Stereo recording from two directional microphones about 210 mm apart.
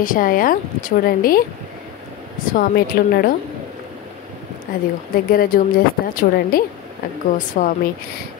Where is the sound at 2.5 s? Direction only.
45° left (ahead or behind).